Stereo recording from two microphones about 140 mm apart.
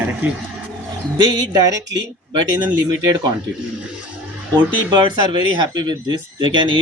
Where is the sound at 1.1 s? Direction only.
30° right (ahead or behind).